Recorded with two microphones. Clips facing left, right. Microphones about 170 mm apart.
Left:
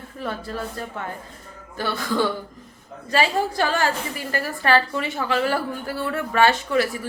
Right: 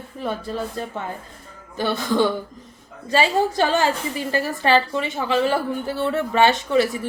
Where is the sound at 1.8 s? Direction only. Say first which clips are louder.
Right 3 dB; 20° right (ahead or behind).